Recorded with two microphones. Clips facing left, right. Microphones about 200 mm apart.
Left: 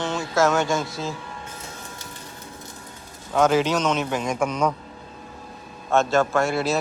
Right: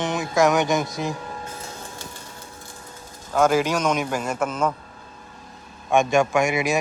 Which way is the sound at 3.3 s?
10° right (ahead or behind).